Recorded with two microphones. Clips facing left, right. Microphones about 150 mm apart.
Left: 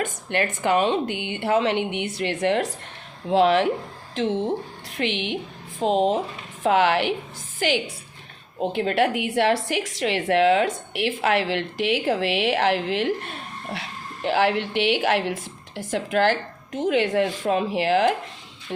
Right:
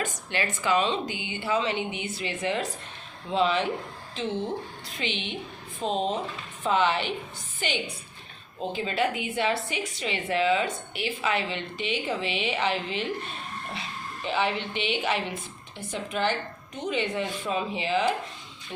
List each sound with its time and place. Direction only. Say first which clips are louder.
0.0 s a woman's voice: left 5 dB; 55° left (ahead or behind); by 4.4 s 75° left (ahead or behind)
4.9 s a woman's voice: left 8 dB; 65° left (ahead or behind)
8.7 s a woman's voice: left 6 dB; 65° left (ahead or behind)